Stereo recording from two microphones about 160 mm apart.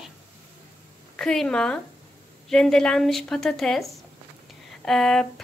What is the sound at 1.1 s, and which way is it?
Speech, 5° left (ahead or behind).